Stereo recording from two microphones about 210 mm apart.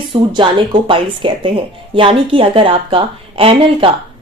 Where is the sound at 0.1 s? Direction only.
25° right (ahead or behind).